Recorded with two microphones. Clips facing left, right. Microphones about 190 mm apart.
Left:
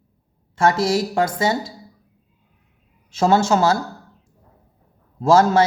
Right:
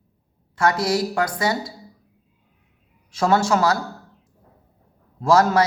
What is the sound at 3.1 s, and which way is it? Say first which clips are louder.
Speech: left 2 dB; 25° left (ahead or behind).